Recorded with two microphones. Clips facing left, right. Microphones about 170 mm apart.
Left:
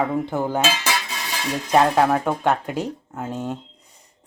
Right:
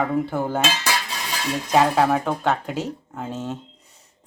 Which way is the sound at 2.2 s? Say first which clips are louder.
Left 2 dB; 10° left (ahead or behind).